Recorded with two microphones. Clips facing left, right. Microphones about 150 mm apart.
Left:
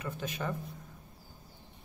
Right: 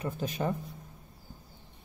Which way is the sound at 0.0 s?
35° right (ahead or behind).